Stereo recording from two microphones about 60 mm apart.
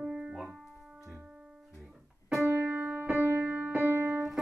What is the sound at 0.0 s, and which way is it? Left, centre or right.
Keyboard, centre.